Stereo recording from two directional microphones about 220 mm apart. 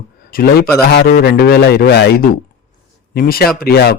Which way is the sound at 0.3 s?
40° left (ahead or behind).